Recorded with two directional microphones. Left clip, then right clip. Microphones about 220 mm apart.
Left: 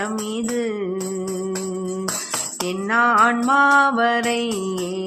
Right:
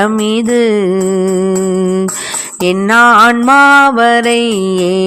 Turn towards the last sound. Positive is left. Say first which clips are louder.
# right 13 dB
turn(degrees=-45)  # may be behind; listen again after turning